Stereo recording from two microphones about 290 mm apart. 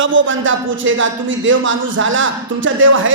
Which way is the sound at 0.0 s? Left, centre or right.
Right.